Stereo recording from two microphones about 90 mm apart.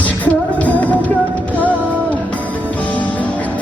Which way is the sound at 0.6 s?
15° left (ahead or behind).